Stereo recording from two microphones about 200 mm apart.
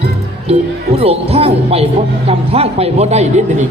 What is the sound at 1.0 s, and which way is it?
Music, 30° right (ahead or behind).